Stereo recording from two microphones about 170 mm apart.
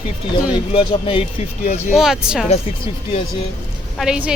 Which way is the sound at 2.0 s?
5° right (ahead or behind).